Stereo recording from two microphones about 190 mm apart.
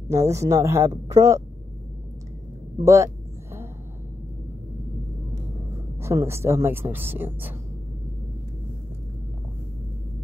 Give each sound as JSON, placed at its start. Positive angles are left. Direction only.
{"t": 0.1, "sound": "speech", "side_deg": -15}
{"t": 2.8, "sound": "speech", "side_deg": -15}
{"t": 5.9, "sound": "speech", "side_deg": -15}